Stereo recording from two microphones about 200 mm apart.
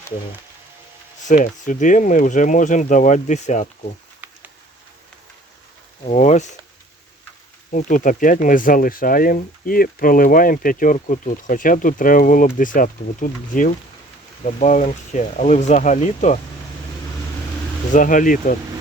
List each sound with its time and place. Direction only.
1.3 s speech: 40° left (ahead or behind)
4.2 s a sound: 10° right (ahead or behind)
6.1 s speech: 35° left (ahead or behind)
7.7 s speech: 40° left (ahead or behind)
17.9 s speech: 40° left (ahead or behind)